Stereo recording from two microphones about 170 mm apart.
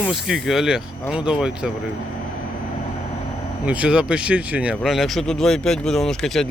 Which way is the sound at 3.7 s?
5° right (ahead or behind).